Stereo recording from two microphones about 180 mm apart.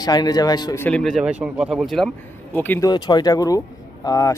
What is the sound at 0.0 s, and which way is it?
Speech, 20° left (ahead or behind).